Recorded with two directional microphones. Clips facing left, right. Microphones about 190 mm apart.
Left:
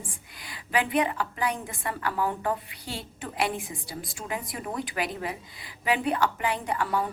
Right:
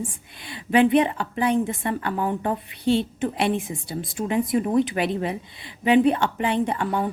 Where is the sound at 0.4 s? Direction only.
25° right (ahead or behind).